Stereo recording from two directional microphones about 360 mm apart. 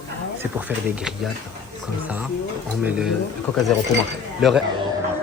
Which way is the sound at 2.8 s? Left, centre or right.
Centre.